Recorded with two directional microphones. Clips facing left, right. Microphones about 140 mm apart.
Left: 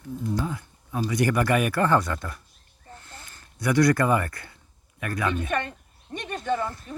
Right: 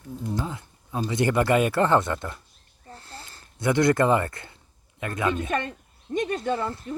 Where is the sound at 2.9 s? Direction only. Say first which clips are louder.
Right 2 dB; 35° right (ahead or behind).